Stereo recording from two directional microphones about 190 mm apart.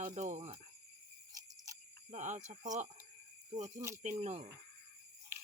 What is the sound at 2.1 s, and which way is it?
Speech, 40° right (ahead or behind).